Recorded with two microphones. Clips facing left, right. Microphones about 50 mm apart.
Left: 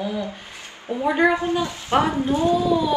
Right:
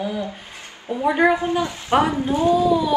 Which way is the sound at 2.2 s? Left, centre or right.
Right.